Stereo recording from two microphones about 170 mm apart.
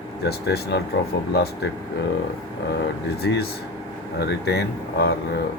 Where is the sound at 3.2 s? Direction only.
70° left (ahead or behind).